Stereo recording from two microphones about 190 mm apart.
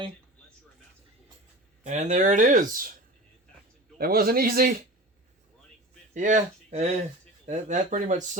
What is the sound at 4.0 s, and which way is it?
Speech, 50° right (ahead or behind).